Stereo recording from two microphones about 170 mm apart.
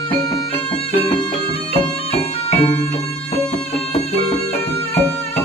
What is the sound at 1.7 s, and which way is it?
Bagpipes, 35° left (ahead or behind).